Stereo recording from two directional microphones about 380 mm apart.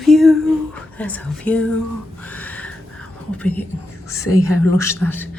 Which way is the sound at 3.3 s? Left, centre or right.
Centre.